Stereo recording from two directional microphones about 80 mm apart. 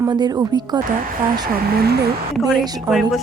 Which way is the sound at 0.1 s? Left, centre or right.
Right.